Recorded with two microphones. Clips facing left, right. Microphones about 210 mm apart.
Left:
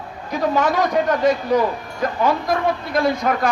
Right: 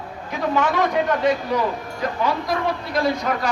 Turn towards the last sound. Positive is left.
turn(degrees=50)  # may be behind; listen again after turning